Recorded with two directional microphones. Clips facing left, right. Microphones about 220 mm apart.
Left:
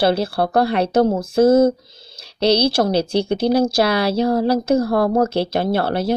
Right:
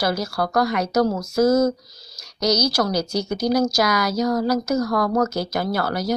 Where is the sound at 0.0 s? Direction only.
30° left (ahead or behind).